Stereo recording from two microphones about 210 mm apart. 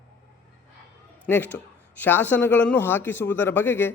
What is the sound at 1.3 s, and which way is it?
Speech, 10° left (ahead or behind).